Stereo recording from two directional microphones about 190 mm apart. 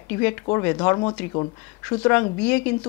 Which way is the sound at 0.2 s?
15° left (ahead or behind).